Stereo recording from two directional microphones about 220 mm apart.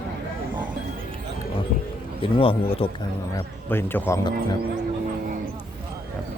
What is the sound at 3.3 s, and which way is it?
Cattle, 10° left (ahead or behind).